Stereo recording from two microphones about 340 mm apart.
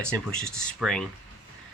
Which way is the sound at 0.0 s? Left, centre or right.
Centre.